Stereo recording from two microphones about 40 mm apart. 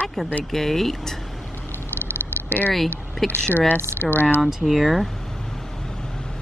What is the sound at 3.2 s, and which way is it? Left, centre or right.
Speech, centre.